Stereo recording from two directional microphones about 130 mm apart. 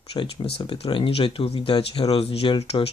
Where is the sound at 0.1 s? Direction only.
40° left (ahead or behind).